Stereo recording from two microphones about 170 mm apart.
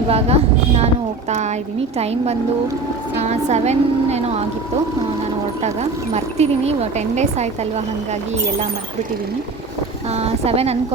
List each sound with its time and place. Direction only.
0.1 s speech: 35° right (ahead or behind)
3.2 s speech: 40° right (ahead or behind)
6.1 s speech: 40° right (ahead or behind)
10.2 s speech: 35° right (ahead or behind)